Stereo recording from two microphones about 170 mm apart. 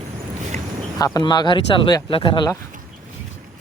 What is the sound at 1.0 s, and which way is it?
Speech, 20° left (ahead or behind).